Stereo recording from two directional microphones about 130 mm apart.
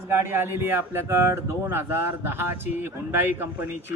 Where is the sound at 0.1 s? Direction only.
20° right (ahead or behind).